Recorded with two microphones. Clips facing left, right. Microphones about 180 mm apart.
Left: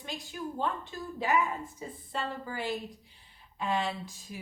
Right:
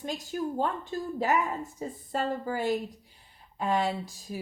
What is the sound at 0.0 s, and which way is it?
A woman's voice, 40° right (ahead or behind).